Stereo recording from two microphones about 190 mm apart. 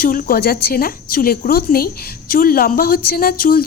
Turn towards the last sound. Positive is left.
turn(degrees=50)  # may be behind; listen again after turning